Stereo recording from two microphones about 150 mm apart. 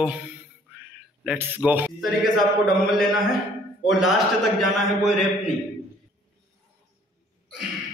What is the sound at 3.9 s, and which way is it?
Speech, centre (ahead or behind).